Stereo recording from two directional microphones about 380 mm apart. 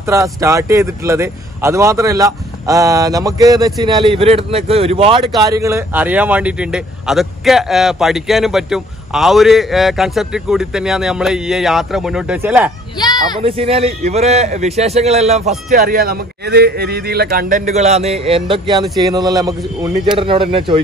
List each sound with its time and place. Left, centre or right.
0.0 s speech: centre
12.9 s a sound: centre
13.4 s a man's voice: centre